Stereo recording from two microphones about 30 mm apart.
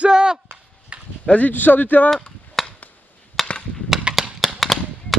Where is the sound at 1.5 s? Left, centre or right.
Left.